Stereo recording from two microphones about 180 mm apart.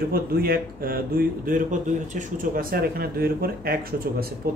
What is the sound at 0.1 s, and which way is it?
Speech, 55° right (ahead or behind).